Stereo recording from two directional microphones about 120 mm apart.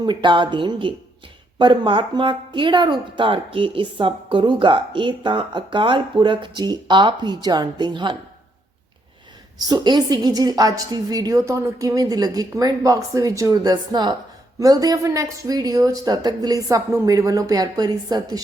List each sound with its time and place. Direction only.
0.0 s a woman's voice: 40° right (ahead or behind)
9.6 s a woman's voice: 35° right (ahead or behind)